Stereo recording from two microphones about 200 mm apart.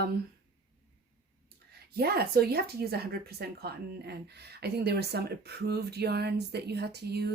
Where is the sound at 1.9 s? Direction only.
50° right (ahead or behind).